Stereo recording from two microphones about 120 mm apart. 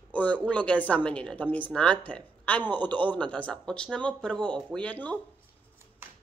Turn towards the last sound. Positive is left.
turn(degrees=10)  # may be behind; listen again after turning